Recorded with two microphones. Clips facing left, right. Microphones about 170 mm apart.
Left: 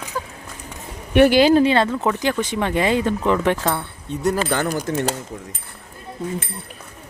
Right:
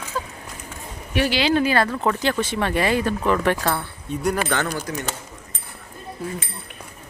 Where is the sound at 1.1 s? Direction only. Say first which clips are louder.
Left 8 dB; 55° left (ahead or behind).